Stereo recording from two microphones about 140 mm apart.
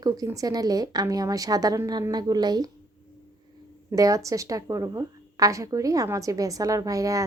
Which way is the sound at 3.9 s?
25° right (ahead or behind).